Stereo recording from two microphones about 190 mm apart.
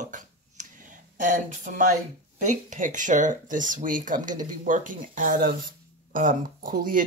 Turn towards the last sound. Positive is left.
turn(degrees=-45)  # may be behind; listen again after turning